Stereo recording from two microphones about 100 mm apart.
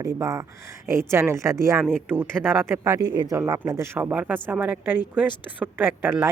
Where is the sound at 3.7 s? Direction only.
25° right (ahead or behind).